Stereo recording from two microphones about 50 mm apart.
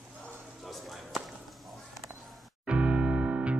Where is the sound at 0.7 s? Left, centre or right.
Centre.